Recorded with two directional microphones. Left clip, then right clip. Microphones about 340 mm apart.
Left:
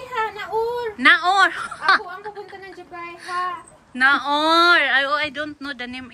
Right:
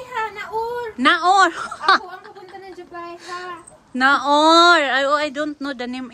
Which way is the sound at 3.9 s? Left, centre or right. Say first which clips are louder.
Right 2 dB; centre.